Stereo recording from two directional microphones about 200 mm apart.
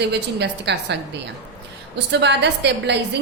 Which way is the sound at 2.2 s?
60° right (ahead or behind).